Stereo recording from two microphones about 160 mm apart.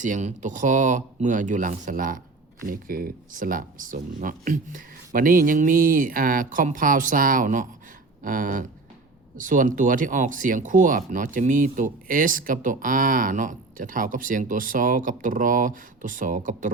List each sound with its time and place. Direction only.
0.0 s speech: 50° right (ahead or behind)